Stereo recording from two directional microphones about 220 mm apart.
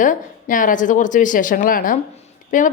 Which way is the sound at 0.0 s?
35° left (ahead or behind).